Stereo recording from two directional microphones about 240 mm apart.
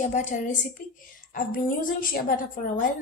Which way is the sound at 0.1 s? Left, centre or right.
Left.